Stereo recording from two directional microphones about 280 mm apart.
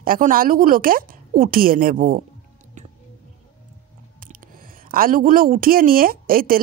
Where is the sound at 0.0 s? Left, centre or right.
Right.